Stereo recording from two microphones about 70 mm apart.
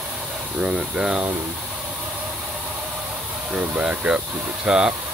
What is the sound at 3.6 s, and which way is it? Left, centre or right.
Speech, centre.